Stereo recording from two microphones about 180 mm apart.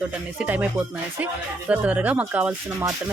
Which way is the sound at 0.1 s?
5° right (ahead or behind).